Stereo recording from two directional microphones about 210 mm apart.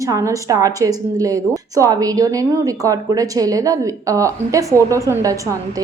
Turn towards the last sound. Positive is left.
turn(degrees=-15)  # may be behind; listen again after turning